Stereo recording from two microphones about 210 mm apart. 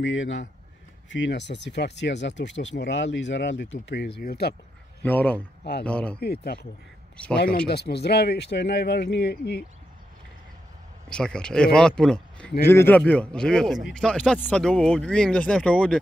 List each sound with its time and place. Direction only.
0.0 s speech: 60° left (ahead or behind)
5.0 s speech: 10° left (ahead or behind)
5.6 s speech: 50° left (ahead or behind)
5.9 s speech: 5° left (ahead or behind)
6.1 s speech: 50° left (ahead or behind)
7.2 s speech: 5° left (ahead or behind)
7.6 s speech: 50° left (ahead or behind)
11.1 s speech: 5° left (ahead or behind)